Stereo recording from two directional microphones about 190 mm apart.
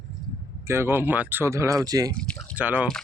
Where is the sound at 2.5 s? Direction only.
10° right (ahead or behind).